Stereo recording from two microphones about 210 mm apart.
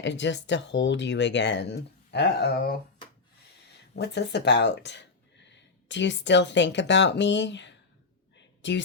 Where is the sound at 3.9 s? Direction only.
55° left (ahead or behind).